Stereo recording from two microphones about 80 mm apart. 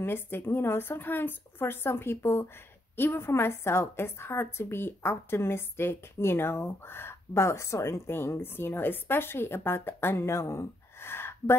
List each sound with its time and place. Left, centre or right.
0.0 s a woman's voice: left